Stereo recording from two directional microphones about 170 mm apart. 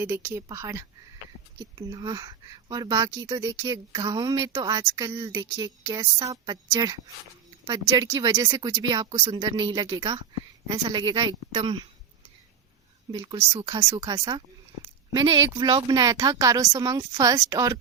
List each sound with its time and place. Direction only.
0.0 s speech: 15° right (ahead or behind)
13.1 s speech: 25° right (ahead or behind)